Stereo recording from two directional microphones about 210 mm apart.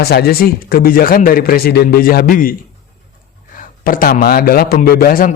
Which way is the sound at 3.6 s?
40° left (ahead or behind).